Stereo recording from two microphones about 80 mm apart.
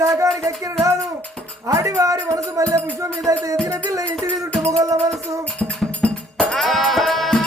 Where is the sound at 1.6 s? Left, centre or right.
Right.